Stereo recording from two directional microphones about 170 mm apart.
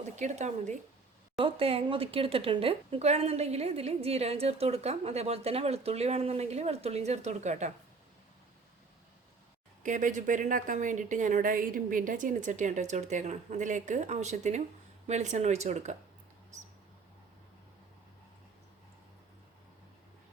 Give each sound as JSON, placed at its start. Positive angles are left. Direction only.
{"t": 0.2, "sound": "a woman's voice", "side_deg": -45}
{"t": 1.4, "sound": "speech", "side_deg": -30}
{"t": 9.8, "sound": "a woman's voice", "side_deg": -50}